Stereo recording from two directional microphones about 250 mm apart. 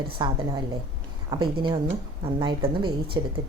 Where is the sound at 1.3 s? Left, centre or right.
Centre.